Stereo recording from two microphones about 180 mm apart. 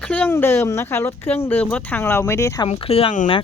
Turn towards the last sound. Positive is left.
turn(degrees=40)  # may be behind; listen again after turning